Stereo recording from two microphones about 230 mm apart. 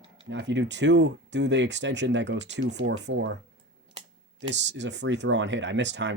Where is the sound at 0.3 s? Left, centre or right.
Right.